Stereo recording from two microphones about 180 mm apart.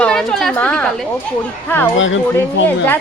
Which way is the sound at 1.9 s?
90° left.